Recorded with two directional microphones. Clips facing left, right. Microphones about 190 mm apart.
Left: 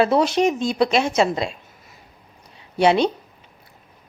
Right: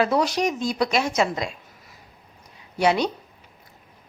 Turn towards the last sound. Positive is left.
turn(degrees=25)  # may be behind; listen again after turning